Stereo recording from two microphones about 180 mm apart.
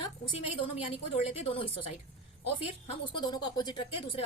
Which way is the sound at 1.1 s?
35° left (ahead or behind).